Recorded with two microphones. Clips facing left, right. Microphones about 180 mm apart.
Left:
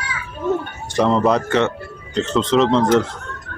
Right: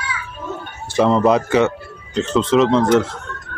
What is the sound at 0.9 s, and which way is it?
Speech, centre (ahead or behind).